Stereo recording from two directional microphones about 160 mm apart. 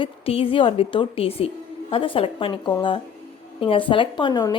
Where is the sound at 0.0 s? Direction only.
35° left (ahead or behind).